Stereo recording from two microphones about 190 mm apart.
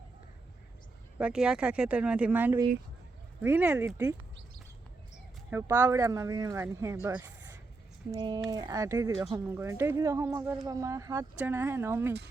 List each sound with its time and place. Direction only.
1.2 s speech: 5° right (ahead or behind)
5.5 s speech: 10° right (ahead or behind)